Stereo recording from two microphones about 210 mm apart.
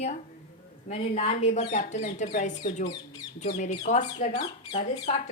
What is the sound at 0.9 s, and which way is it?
A woman's voice, 30° left (ahead or behind).